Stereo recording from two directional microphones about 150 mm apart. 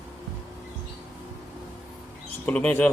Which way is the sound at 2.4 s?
10° left (ahead or behind).